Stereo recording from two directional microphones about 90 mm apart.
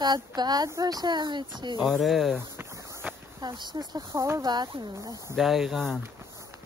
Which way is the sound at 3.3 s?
55° right (ahead or behind).